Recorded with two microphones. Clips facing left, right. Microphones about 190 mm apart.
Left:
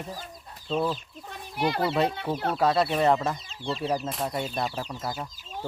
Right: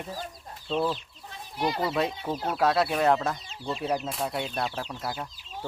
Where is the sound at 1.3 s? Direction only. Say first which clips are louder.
Left 1 dB; 60° left (ahead or behind).